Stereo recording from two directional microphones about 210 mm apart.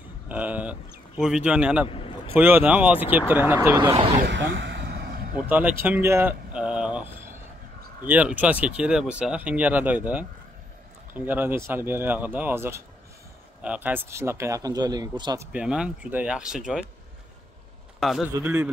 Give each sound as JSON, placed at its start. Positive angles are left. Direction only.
{"t": 0.3, "sound": "speech", "side_deg": -5}
{"t": 1.9, "sound": "a sound", "side_deg": 25}
{"t": 2.3, "sound": "speech", "side_deg": -10}
{"t": 4.3, "sound": "vehicle", "side_deg": -60}
{"t": 5.5, "sound": "a sound", "side_deg": -10}
{"t": 8.1, "sound": "speech", "side_deg": -5}
{"t": 15.5, "sound": "speech", "side_deg": -5}
{"t": 18.0, "sound": "speech", "side_deg": 0}
{"t": 18.3, "sound": "speech", "side_deg": -10}